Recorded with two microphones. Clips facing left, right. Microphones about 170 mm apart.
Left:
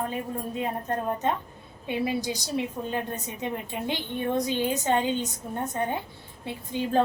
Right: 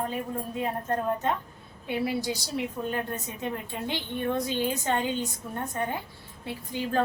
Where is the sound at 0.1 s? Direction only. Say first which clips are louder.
Left 1 dB; 20° left (ahead or behind).